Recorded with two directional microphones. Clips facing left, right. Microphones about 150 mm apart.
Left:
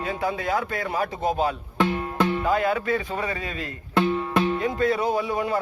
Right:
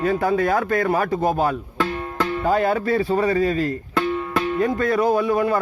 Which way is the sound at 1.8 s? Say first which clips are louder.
Left 4 dB; 20° left (ahead or behind).